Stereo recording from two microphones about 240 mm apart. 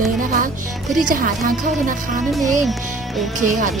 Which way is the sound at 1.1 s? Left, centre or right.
Right.